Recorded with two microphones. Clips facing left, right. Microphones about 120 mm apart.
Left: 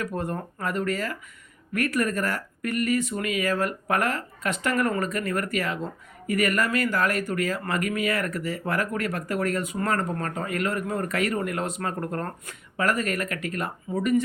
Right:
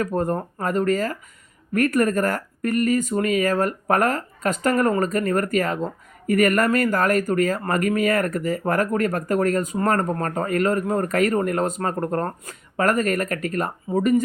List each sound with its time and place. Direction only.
0.0 s speech: 40° right (ahead or behind)